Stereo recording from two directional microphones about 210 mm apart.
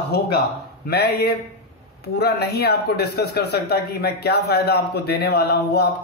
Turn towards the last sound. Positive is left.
turn(degrees=50)  # may be behind; listen again after turning